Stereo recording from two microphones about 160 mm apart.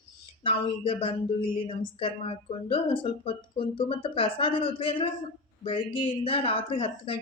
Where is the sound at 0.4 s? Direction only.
35° left (ahead or behind).